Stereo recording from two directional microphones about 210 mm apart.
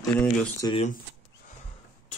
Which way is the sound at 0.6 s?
20° left (ahead or behind).